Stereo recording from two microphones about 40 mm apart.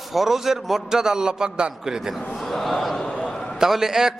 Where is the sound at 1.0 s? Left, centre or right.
Centre.